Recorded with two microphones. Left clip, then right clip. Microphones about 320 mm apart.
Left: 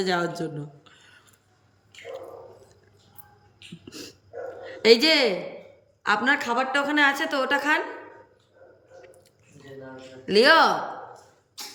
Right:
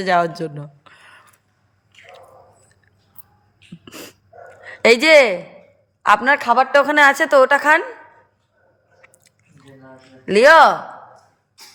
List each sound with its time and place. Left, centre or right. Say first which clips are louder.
0.0 s a sound: right 8 dB; centre
3.8 s dog: right 5 dB; centre
4.8 s a woman's voice: right 7 dB; centre
10.2 s a woman's voice: right 8 dB; centre